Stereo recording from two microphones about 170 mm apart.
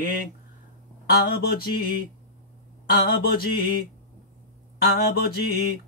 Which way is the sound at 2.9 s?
65° left (ahead or behind).